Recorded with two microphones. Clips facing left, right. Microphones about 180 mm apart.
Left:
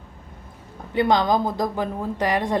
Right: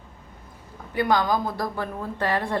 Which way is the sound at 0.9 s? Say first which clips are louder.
Left 3 dB; 25° left (ahead or behind).